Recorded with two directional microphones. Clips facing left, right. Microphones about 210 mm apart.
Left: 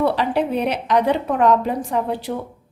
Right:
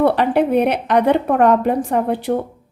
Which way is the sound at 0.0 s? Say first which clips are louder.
Right 4 dB; 55° right (ahead or behind).